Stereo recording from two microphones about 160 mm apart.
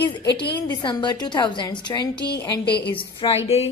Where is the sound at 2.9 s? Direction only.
35° left (ahead or behind).